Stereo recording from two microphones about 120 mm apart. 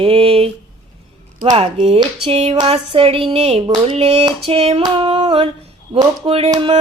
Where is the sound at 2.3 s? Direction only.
65° right (ahead or behind).